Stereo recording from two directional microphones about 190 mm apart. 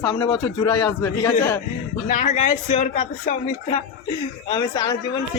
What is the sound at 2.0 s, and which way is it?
Speech, 45° left (ahead or behind).